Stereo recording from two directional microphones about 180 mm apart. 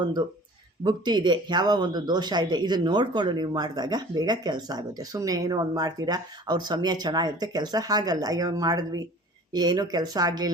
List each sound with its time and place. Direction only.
0.0 s speech: 25° right (ahead or behind)